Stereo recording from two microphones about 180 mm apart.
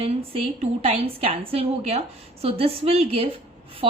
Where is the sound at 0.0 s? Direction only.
35° right (ahead or behind).